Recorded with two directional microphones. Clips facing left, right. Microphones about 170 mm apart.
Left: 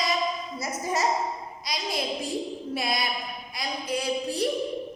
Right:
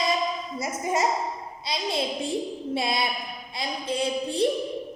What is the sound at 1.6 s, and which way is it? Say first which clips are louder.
A child's voice: right 3 dB; 25° right (ahead or behind).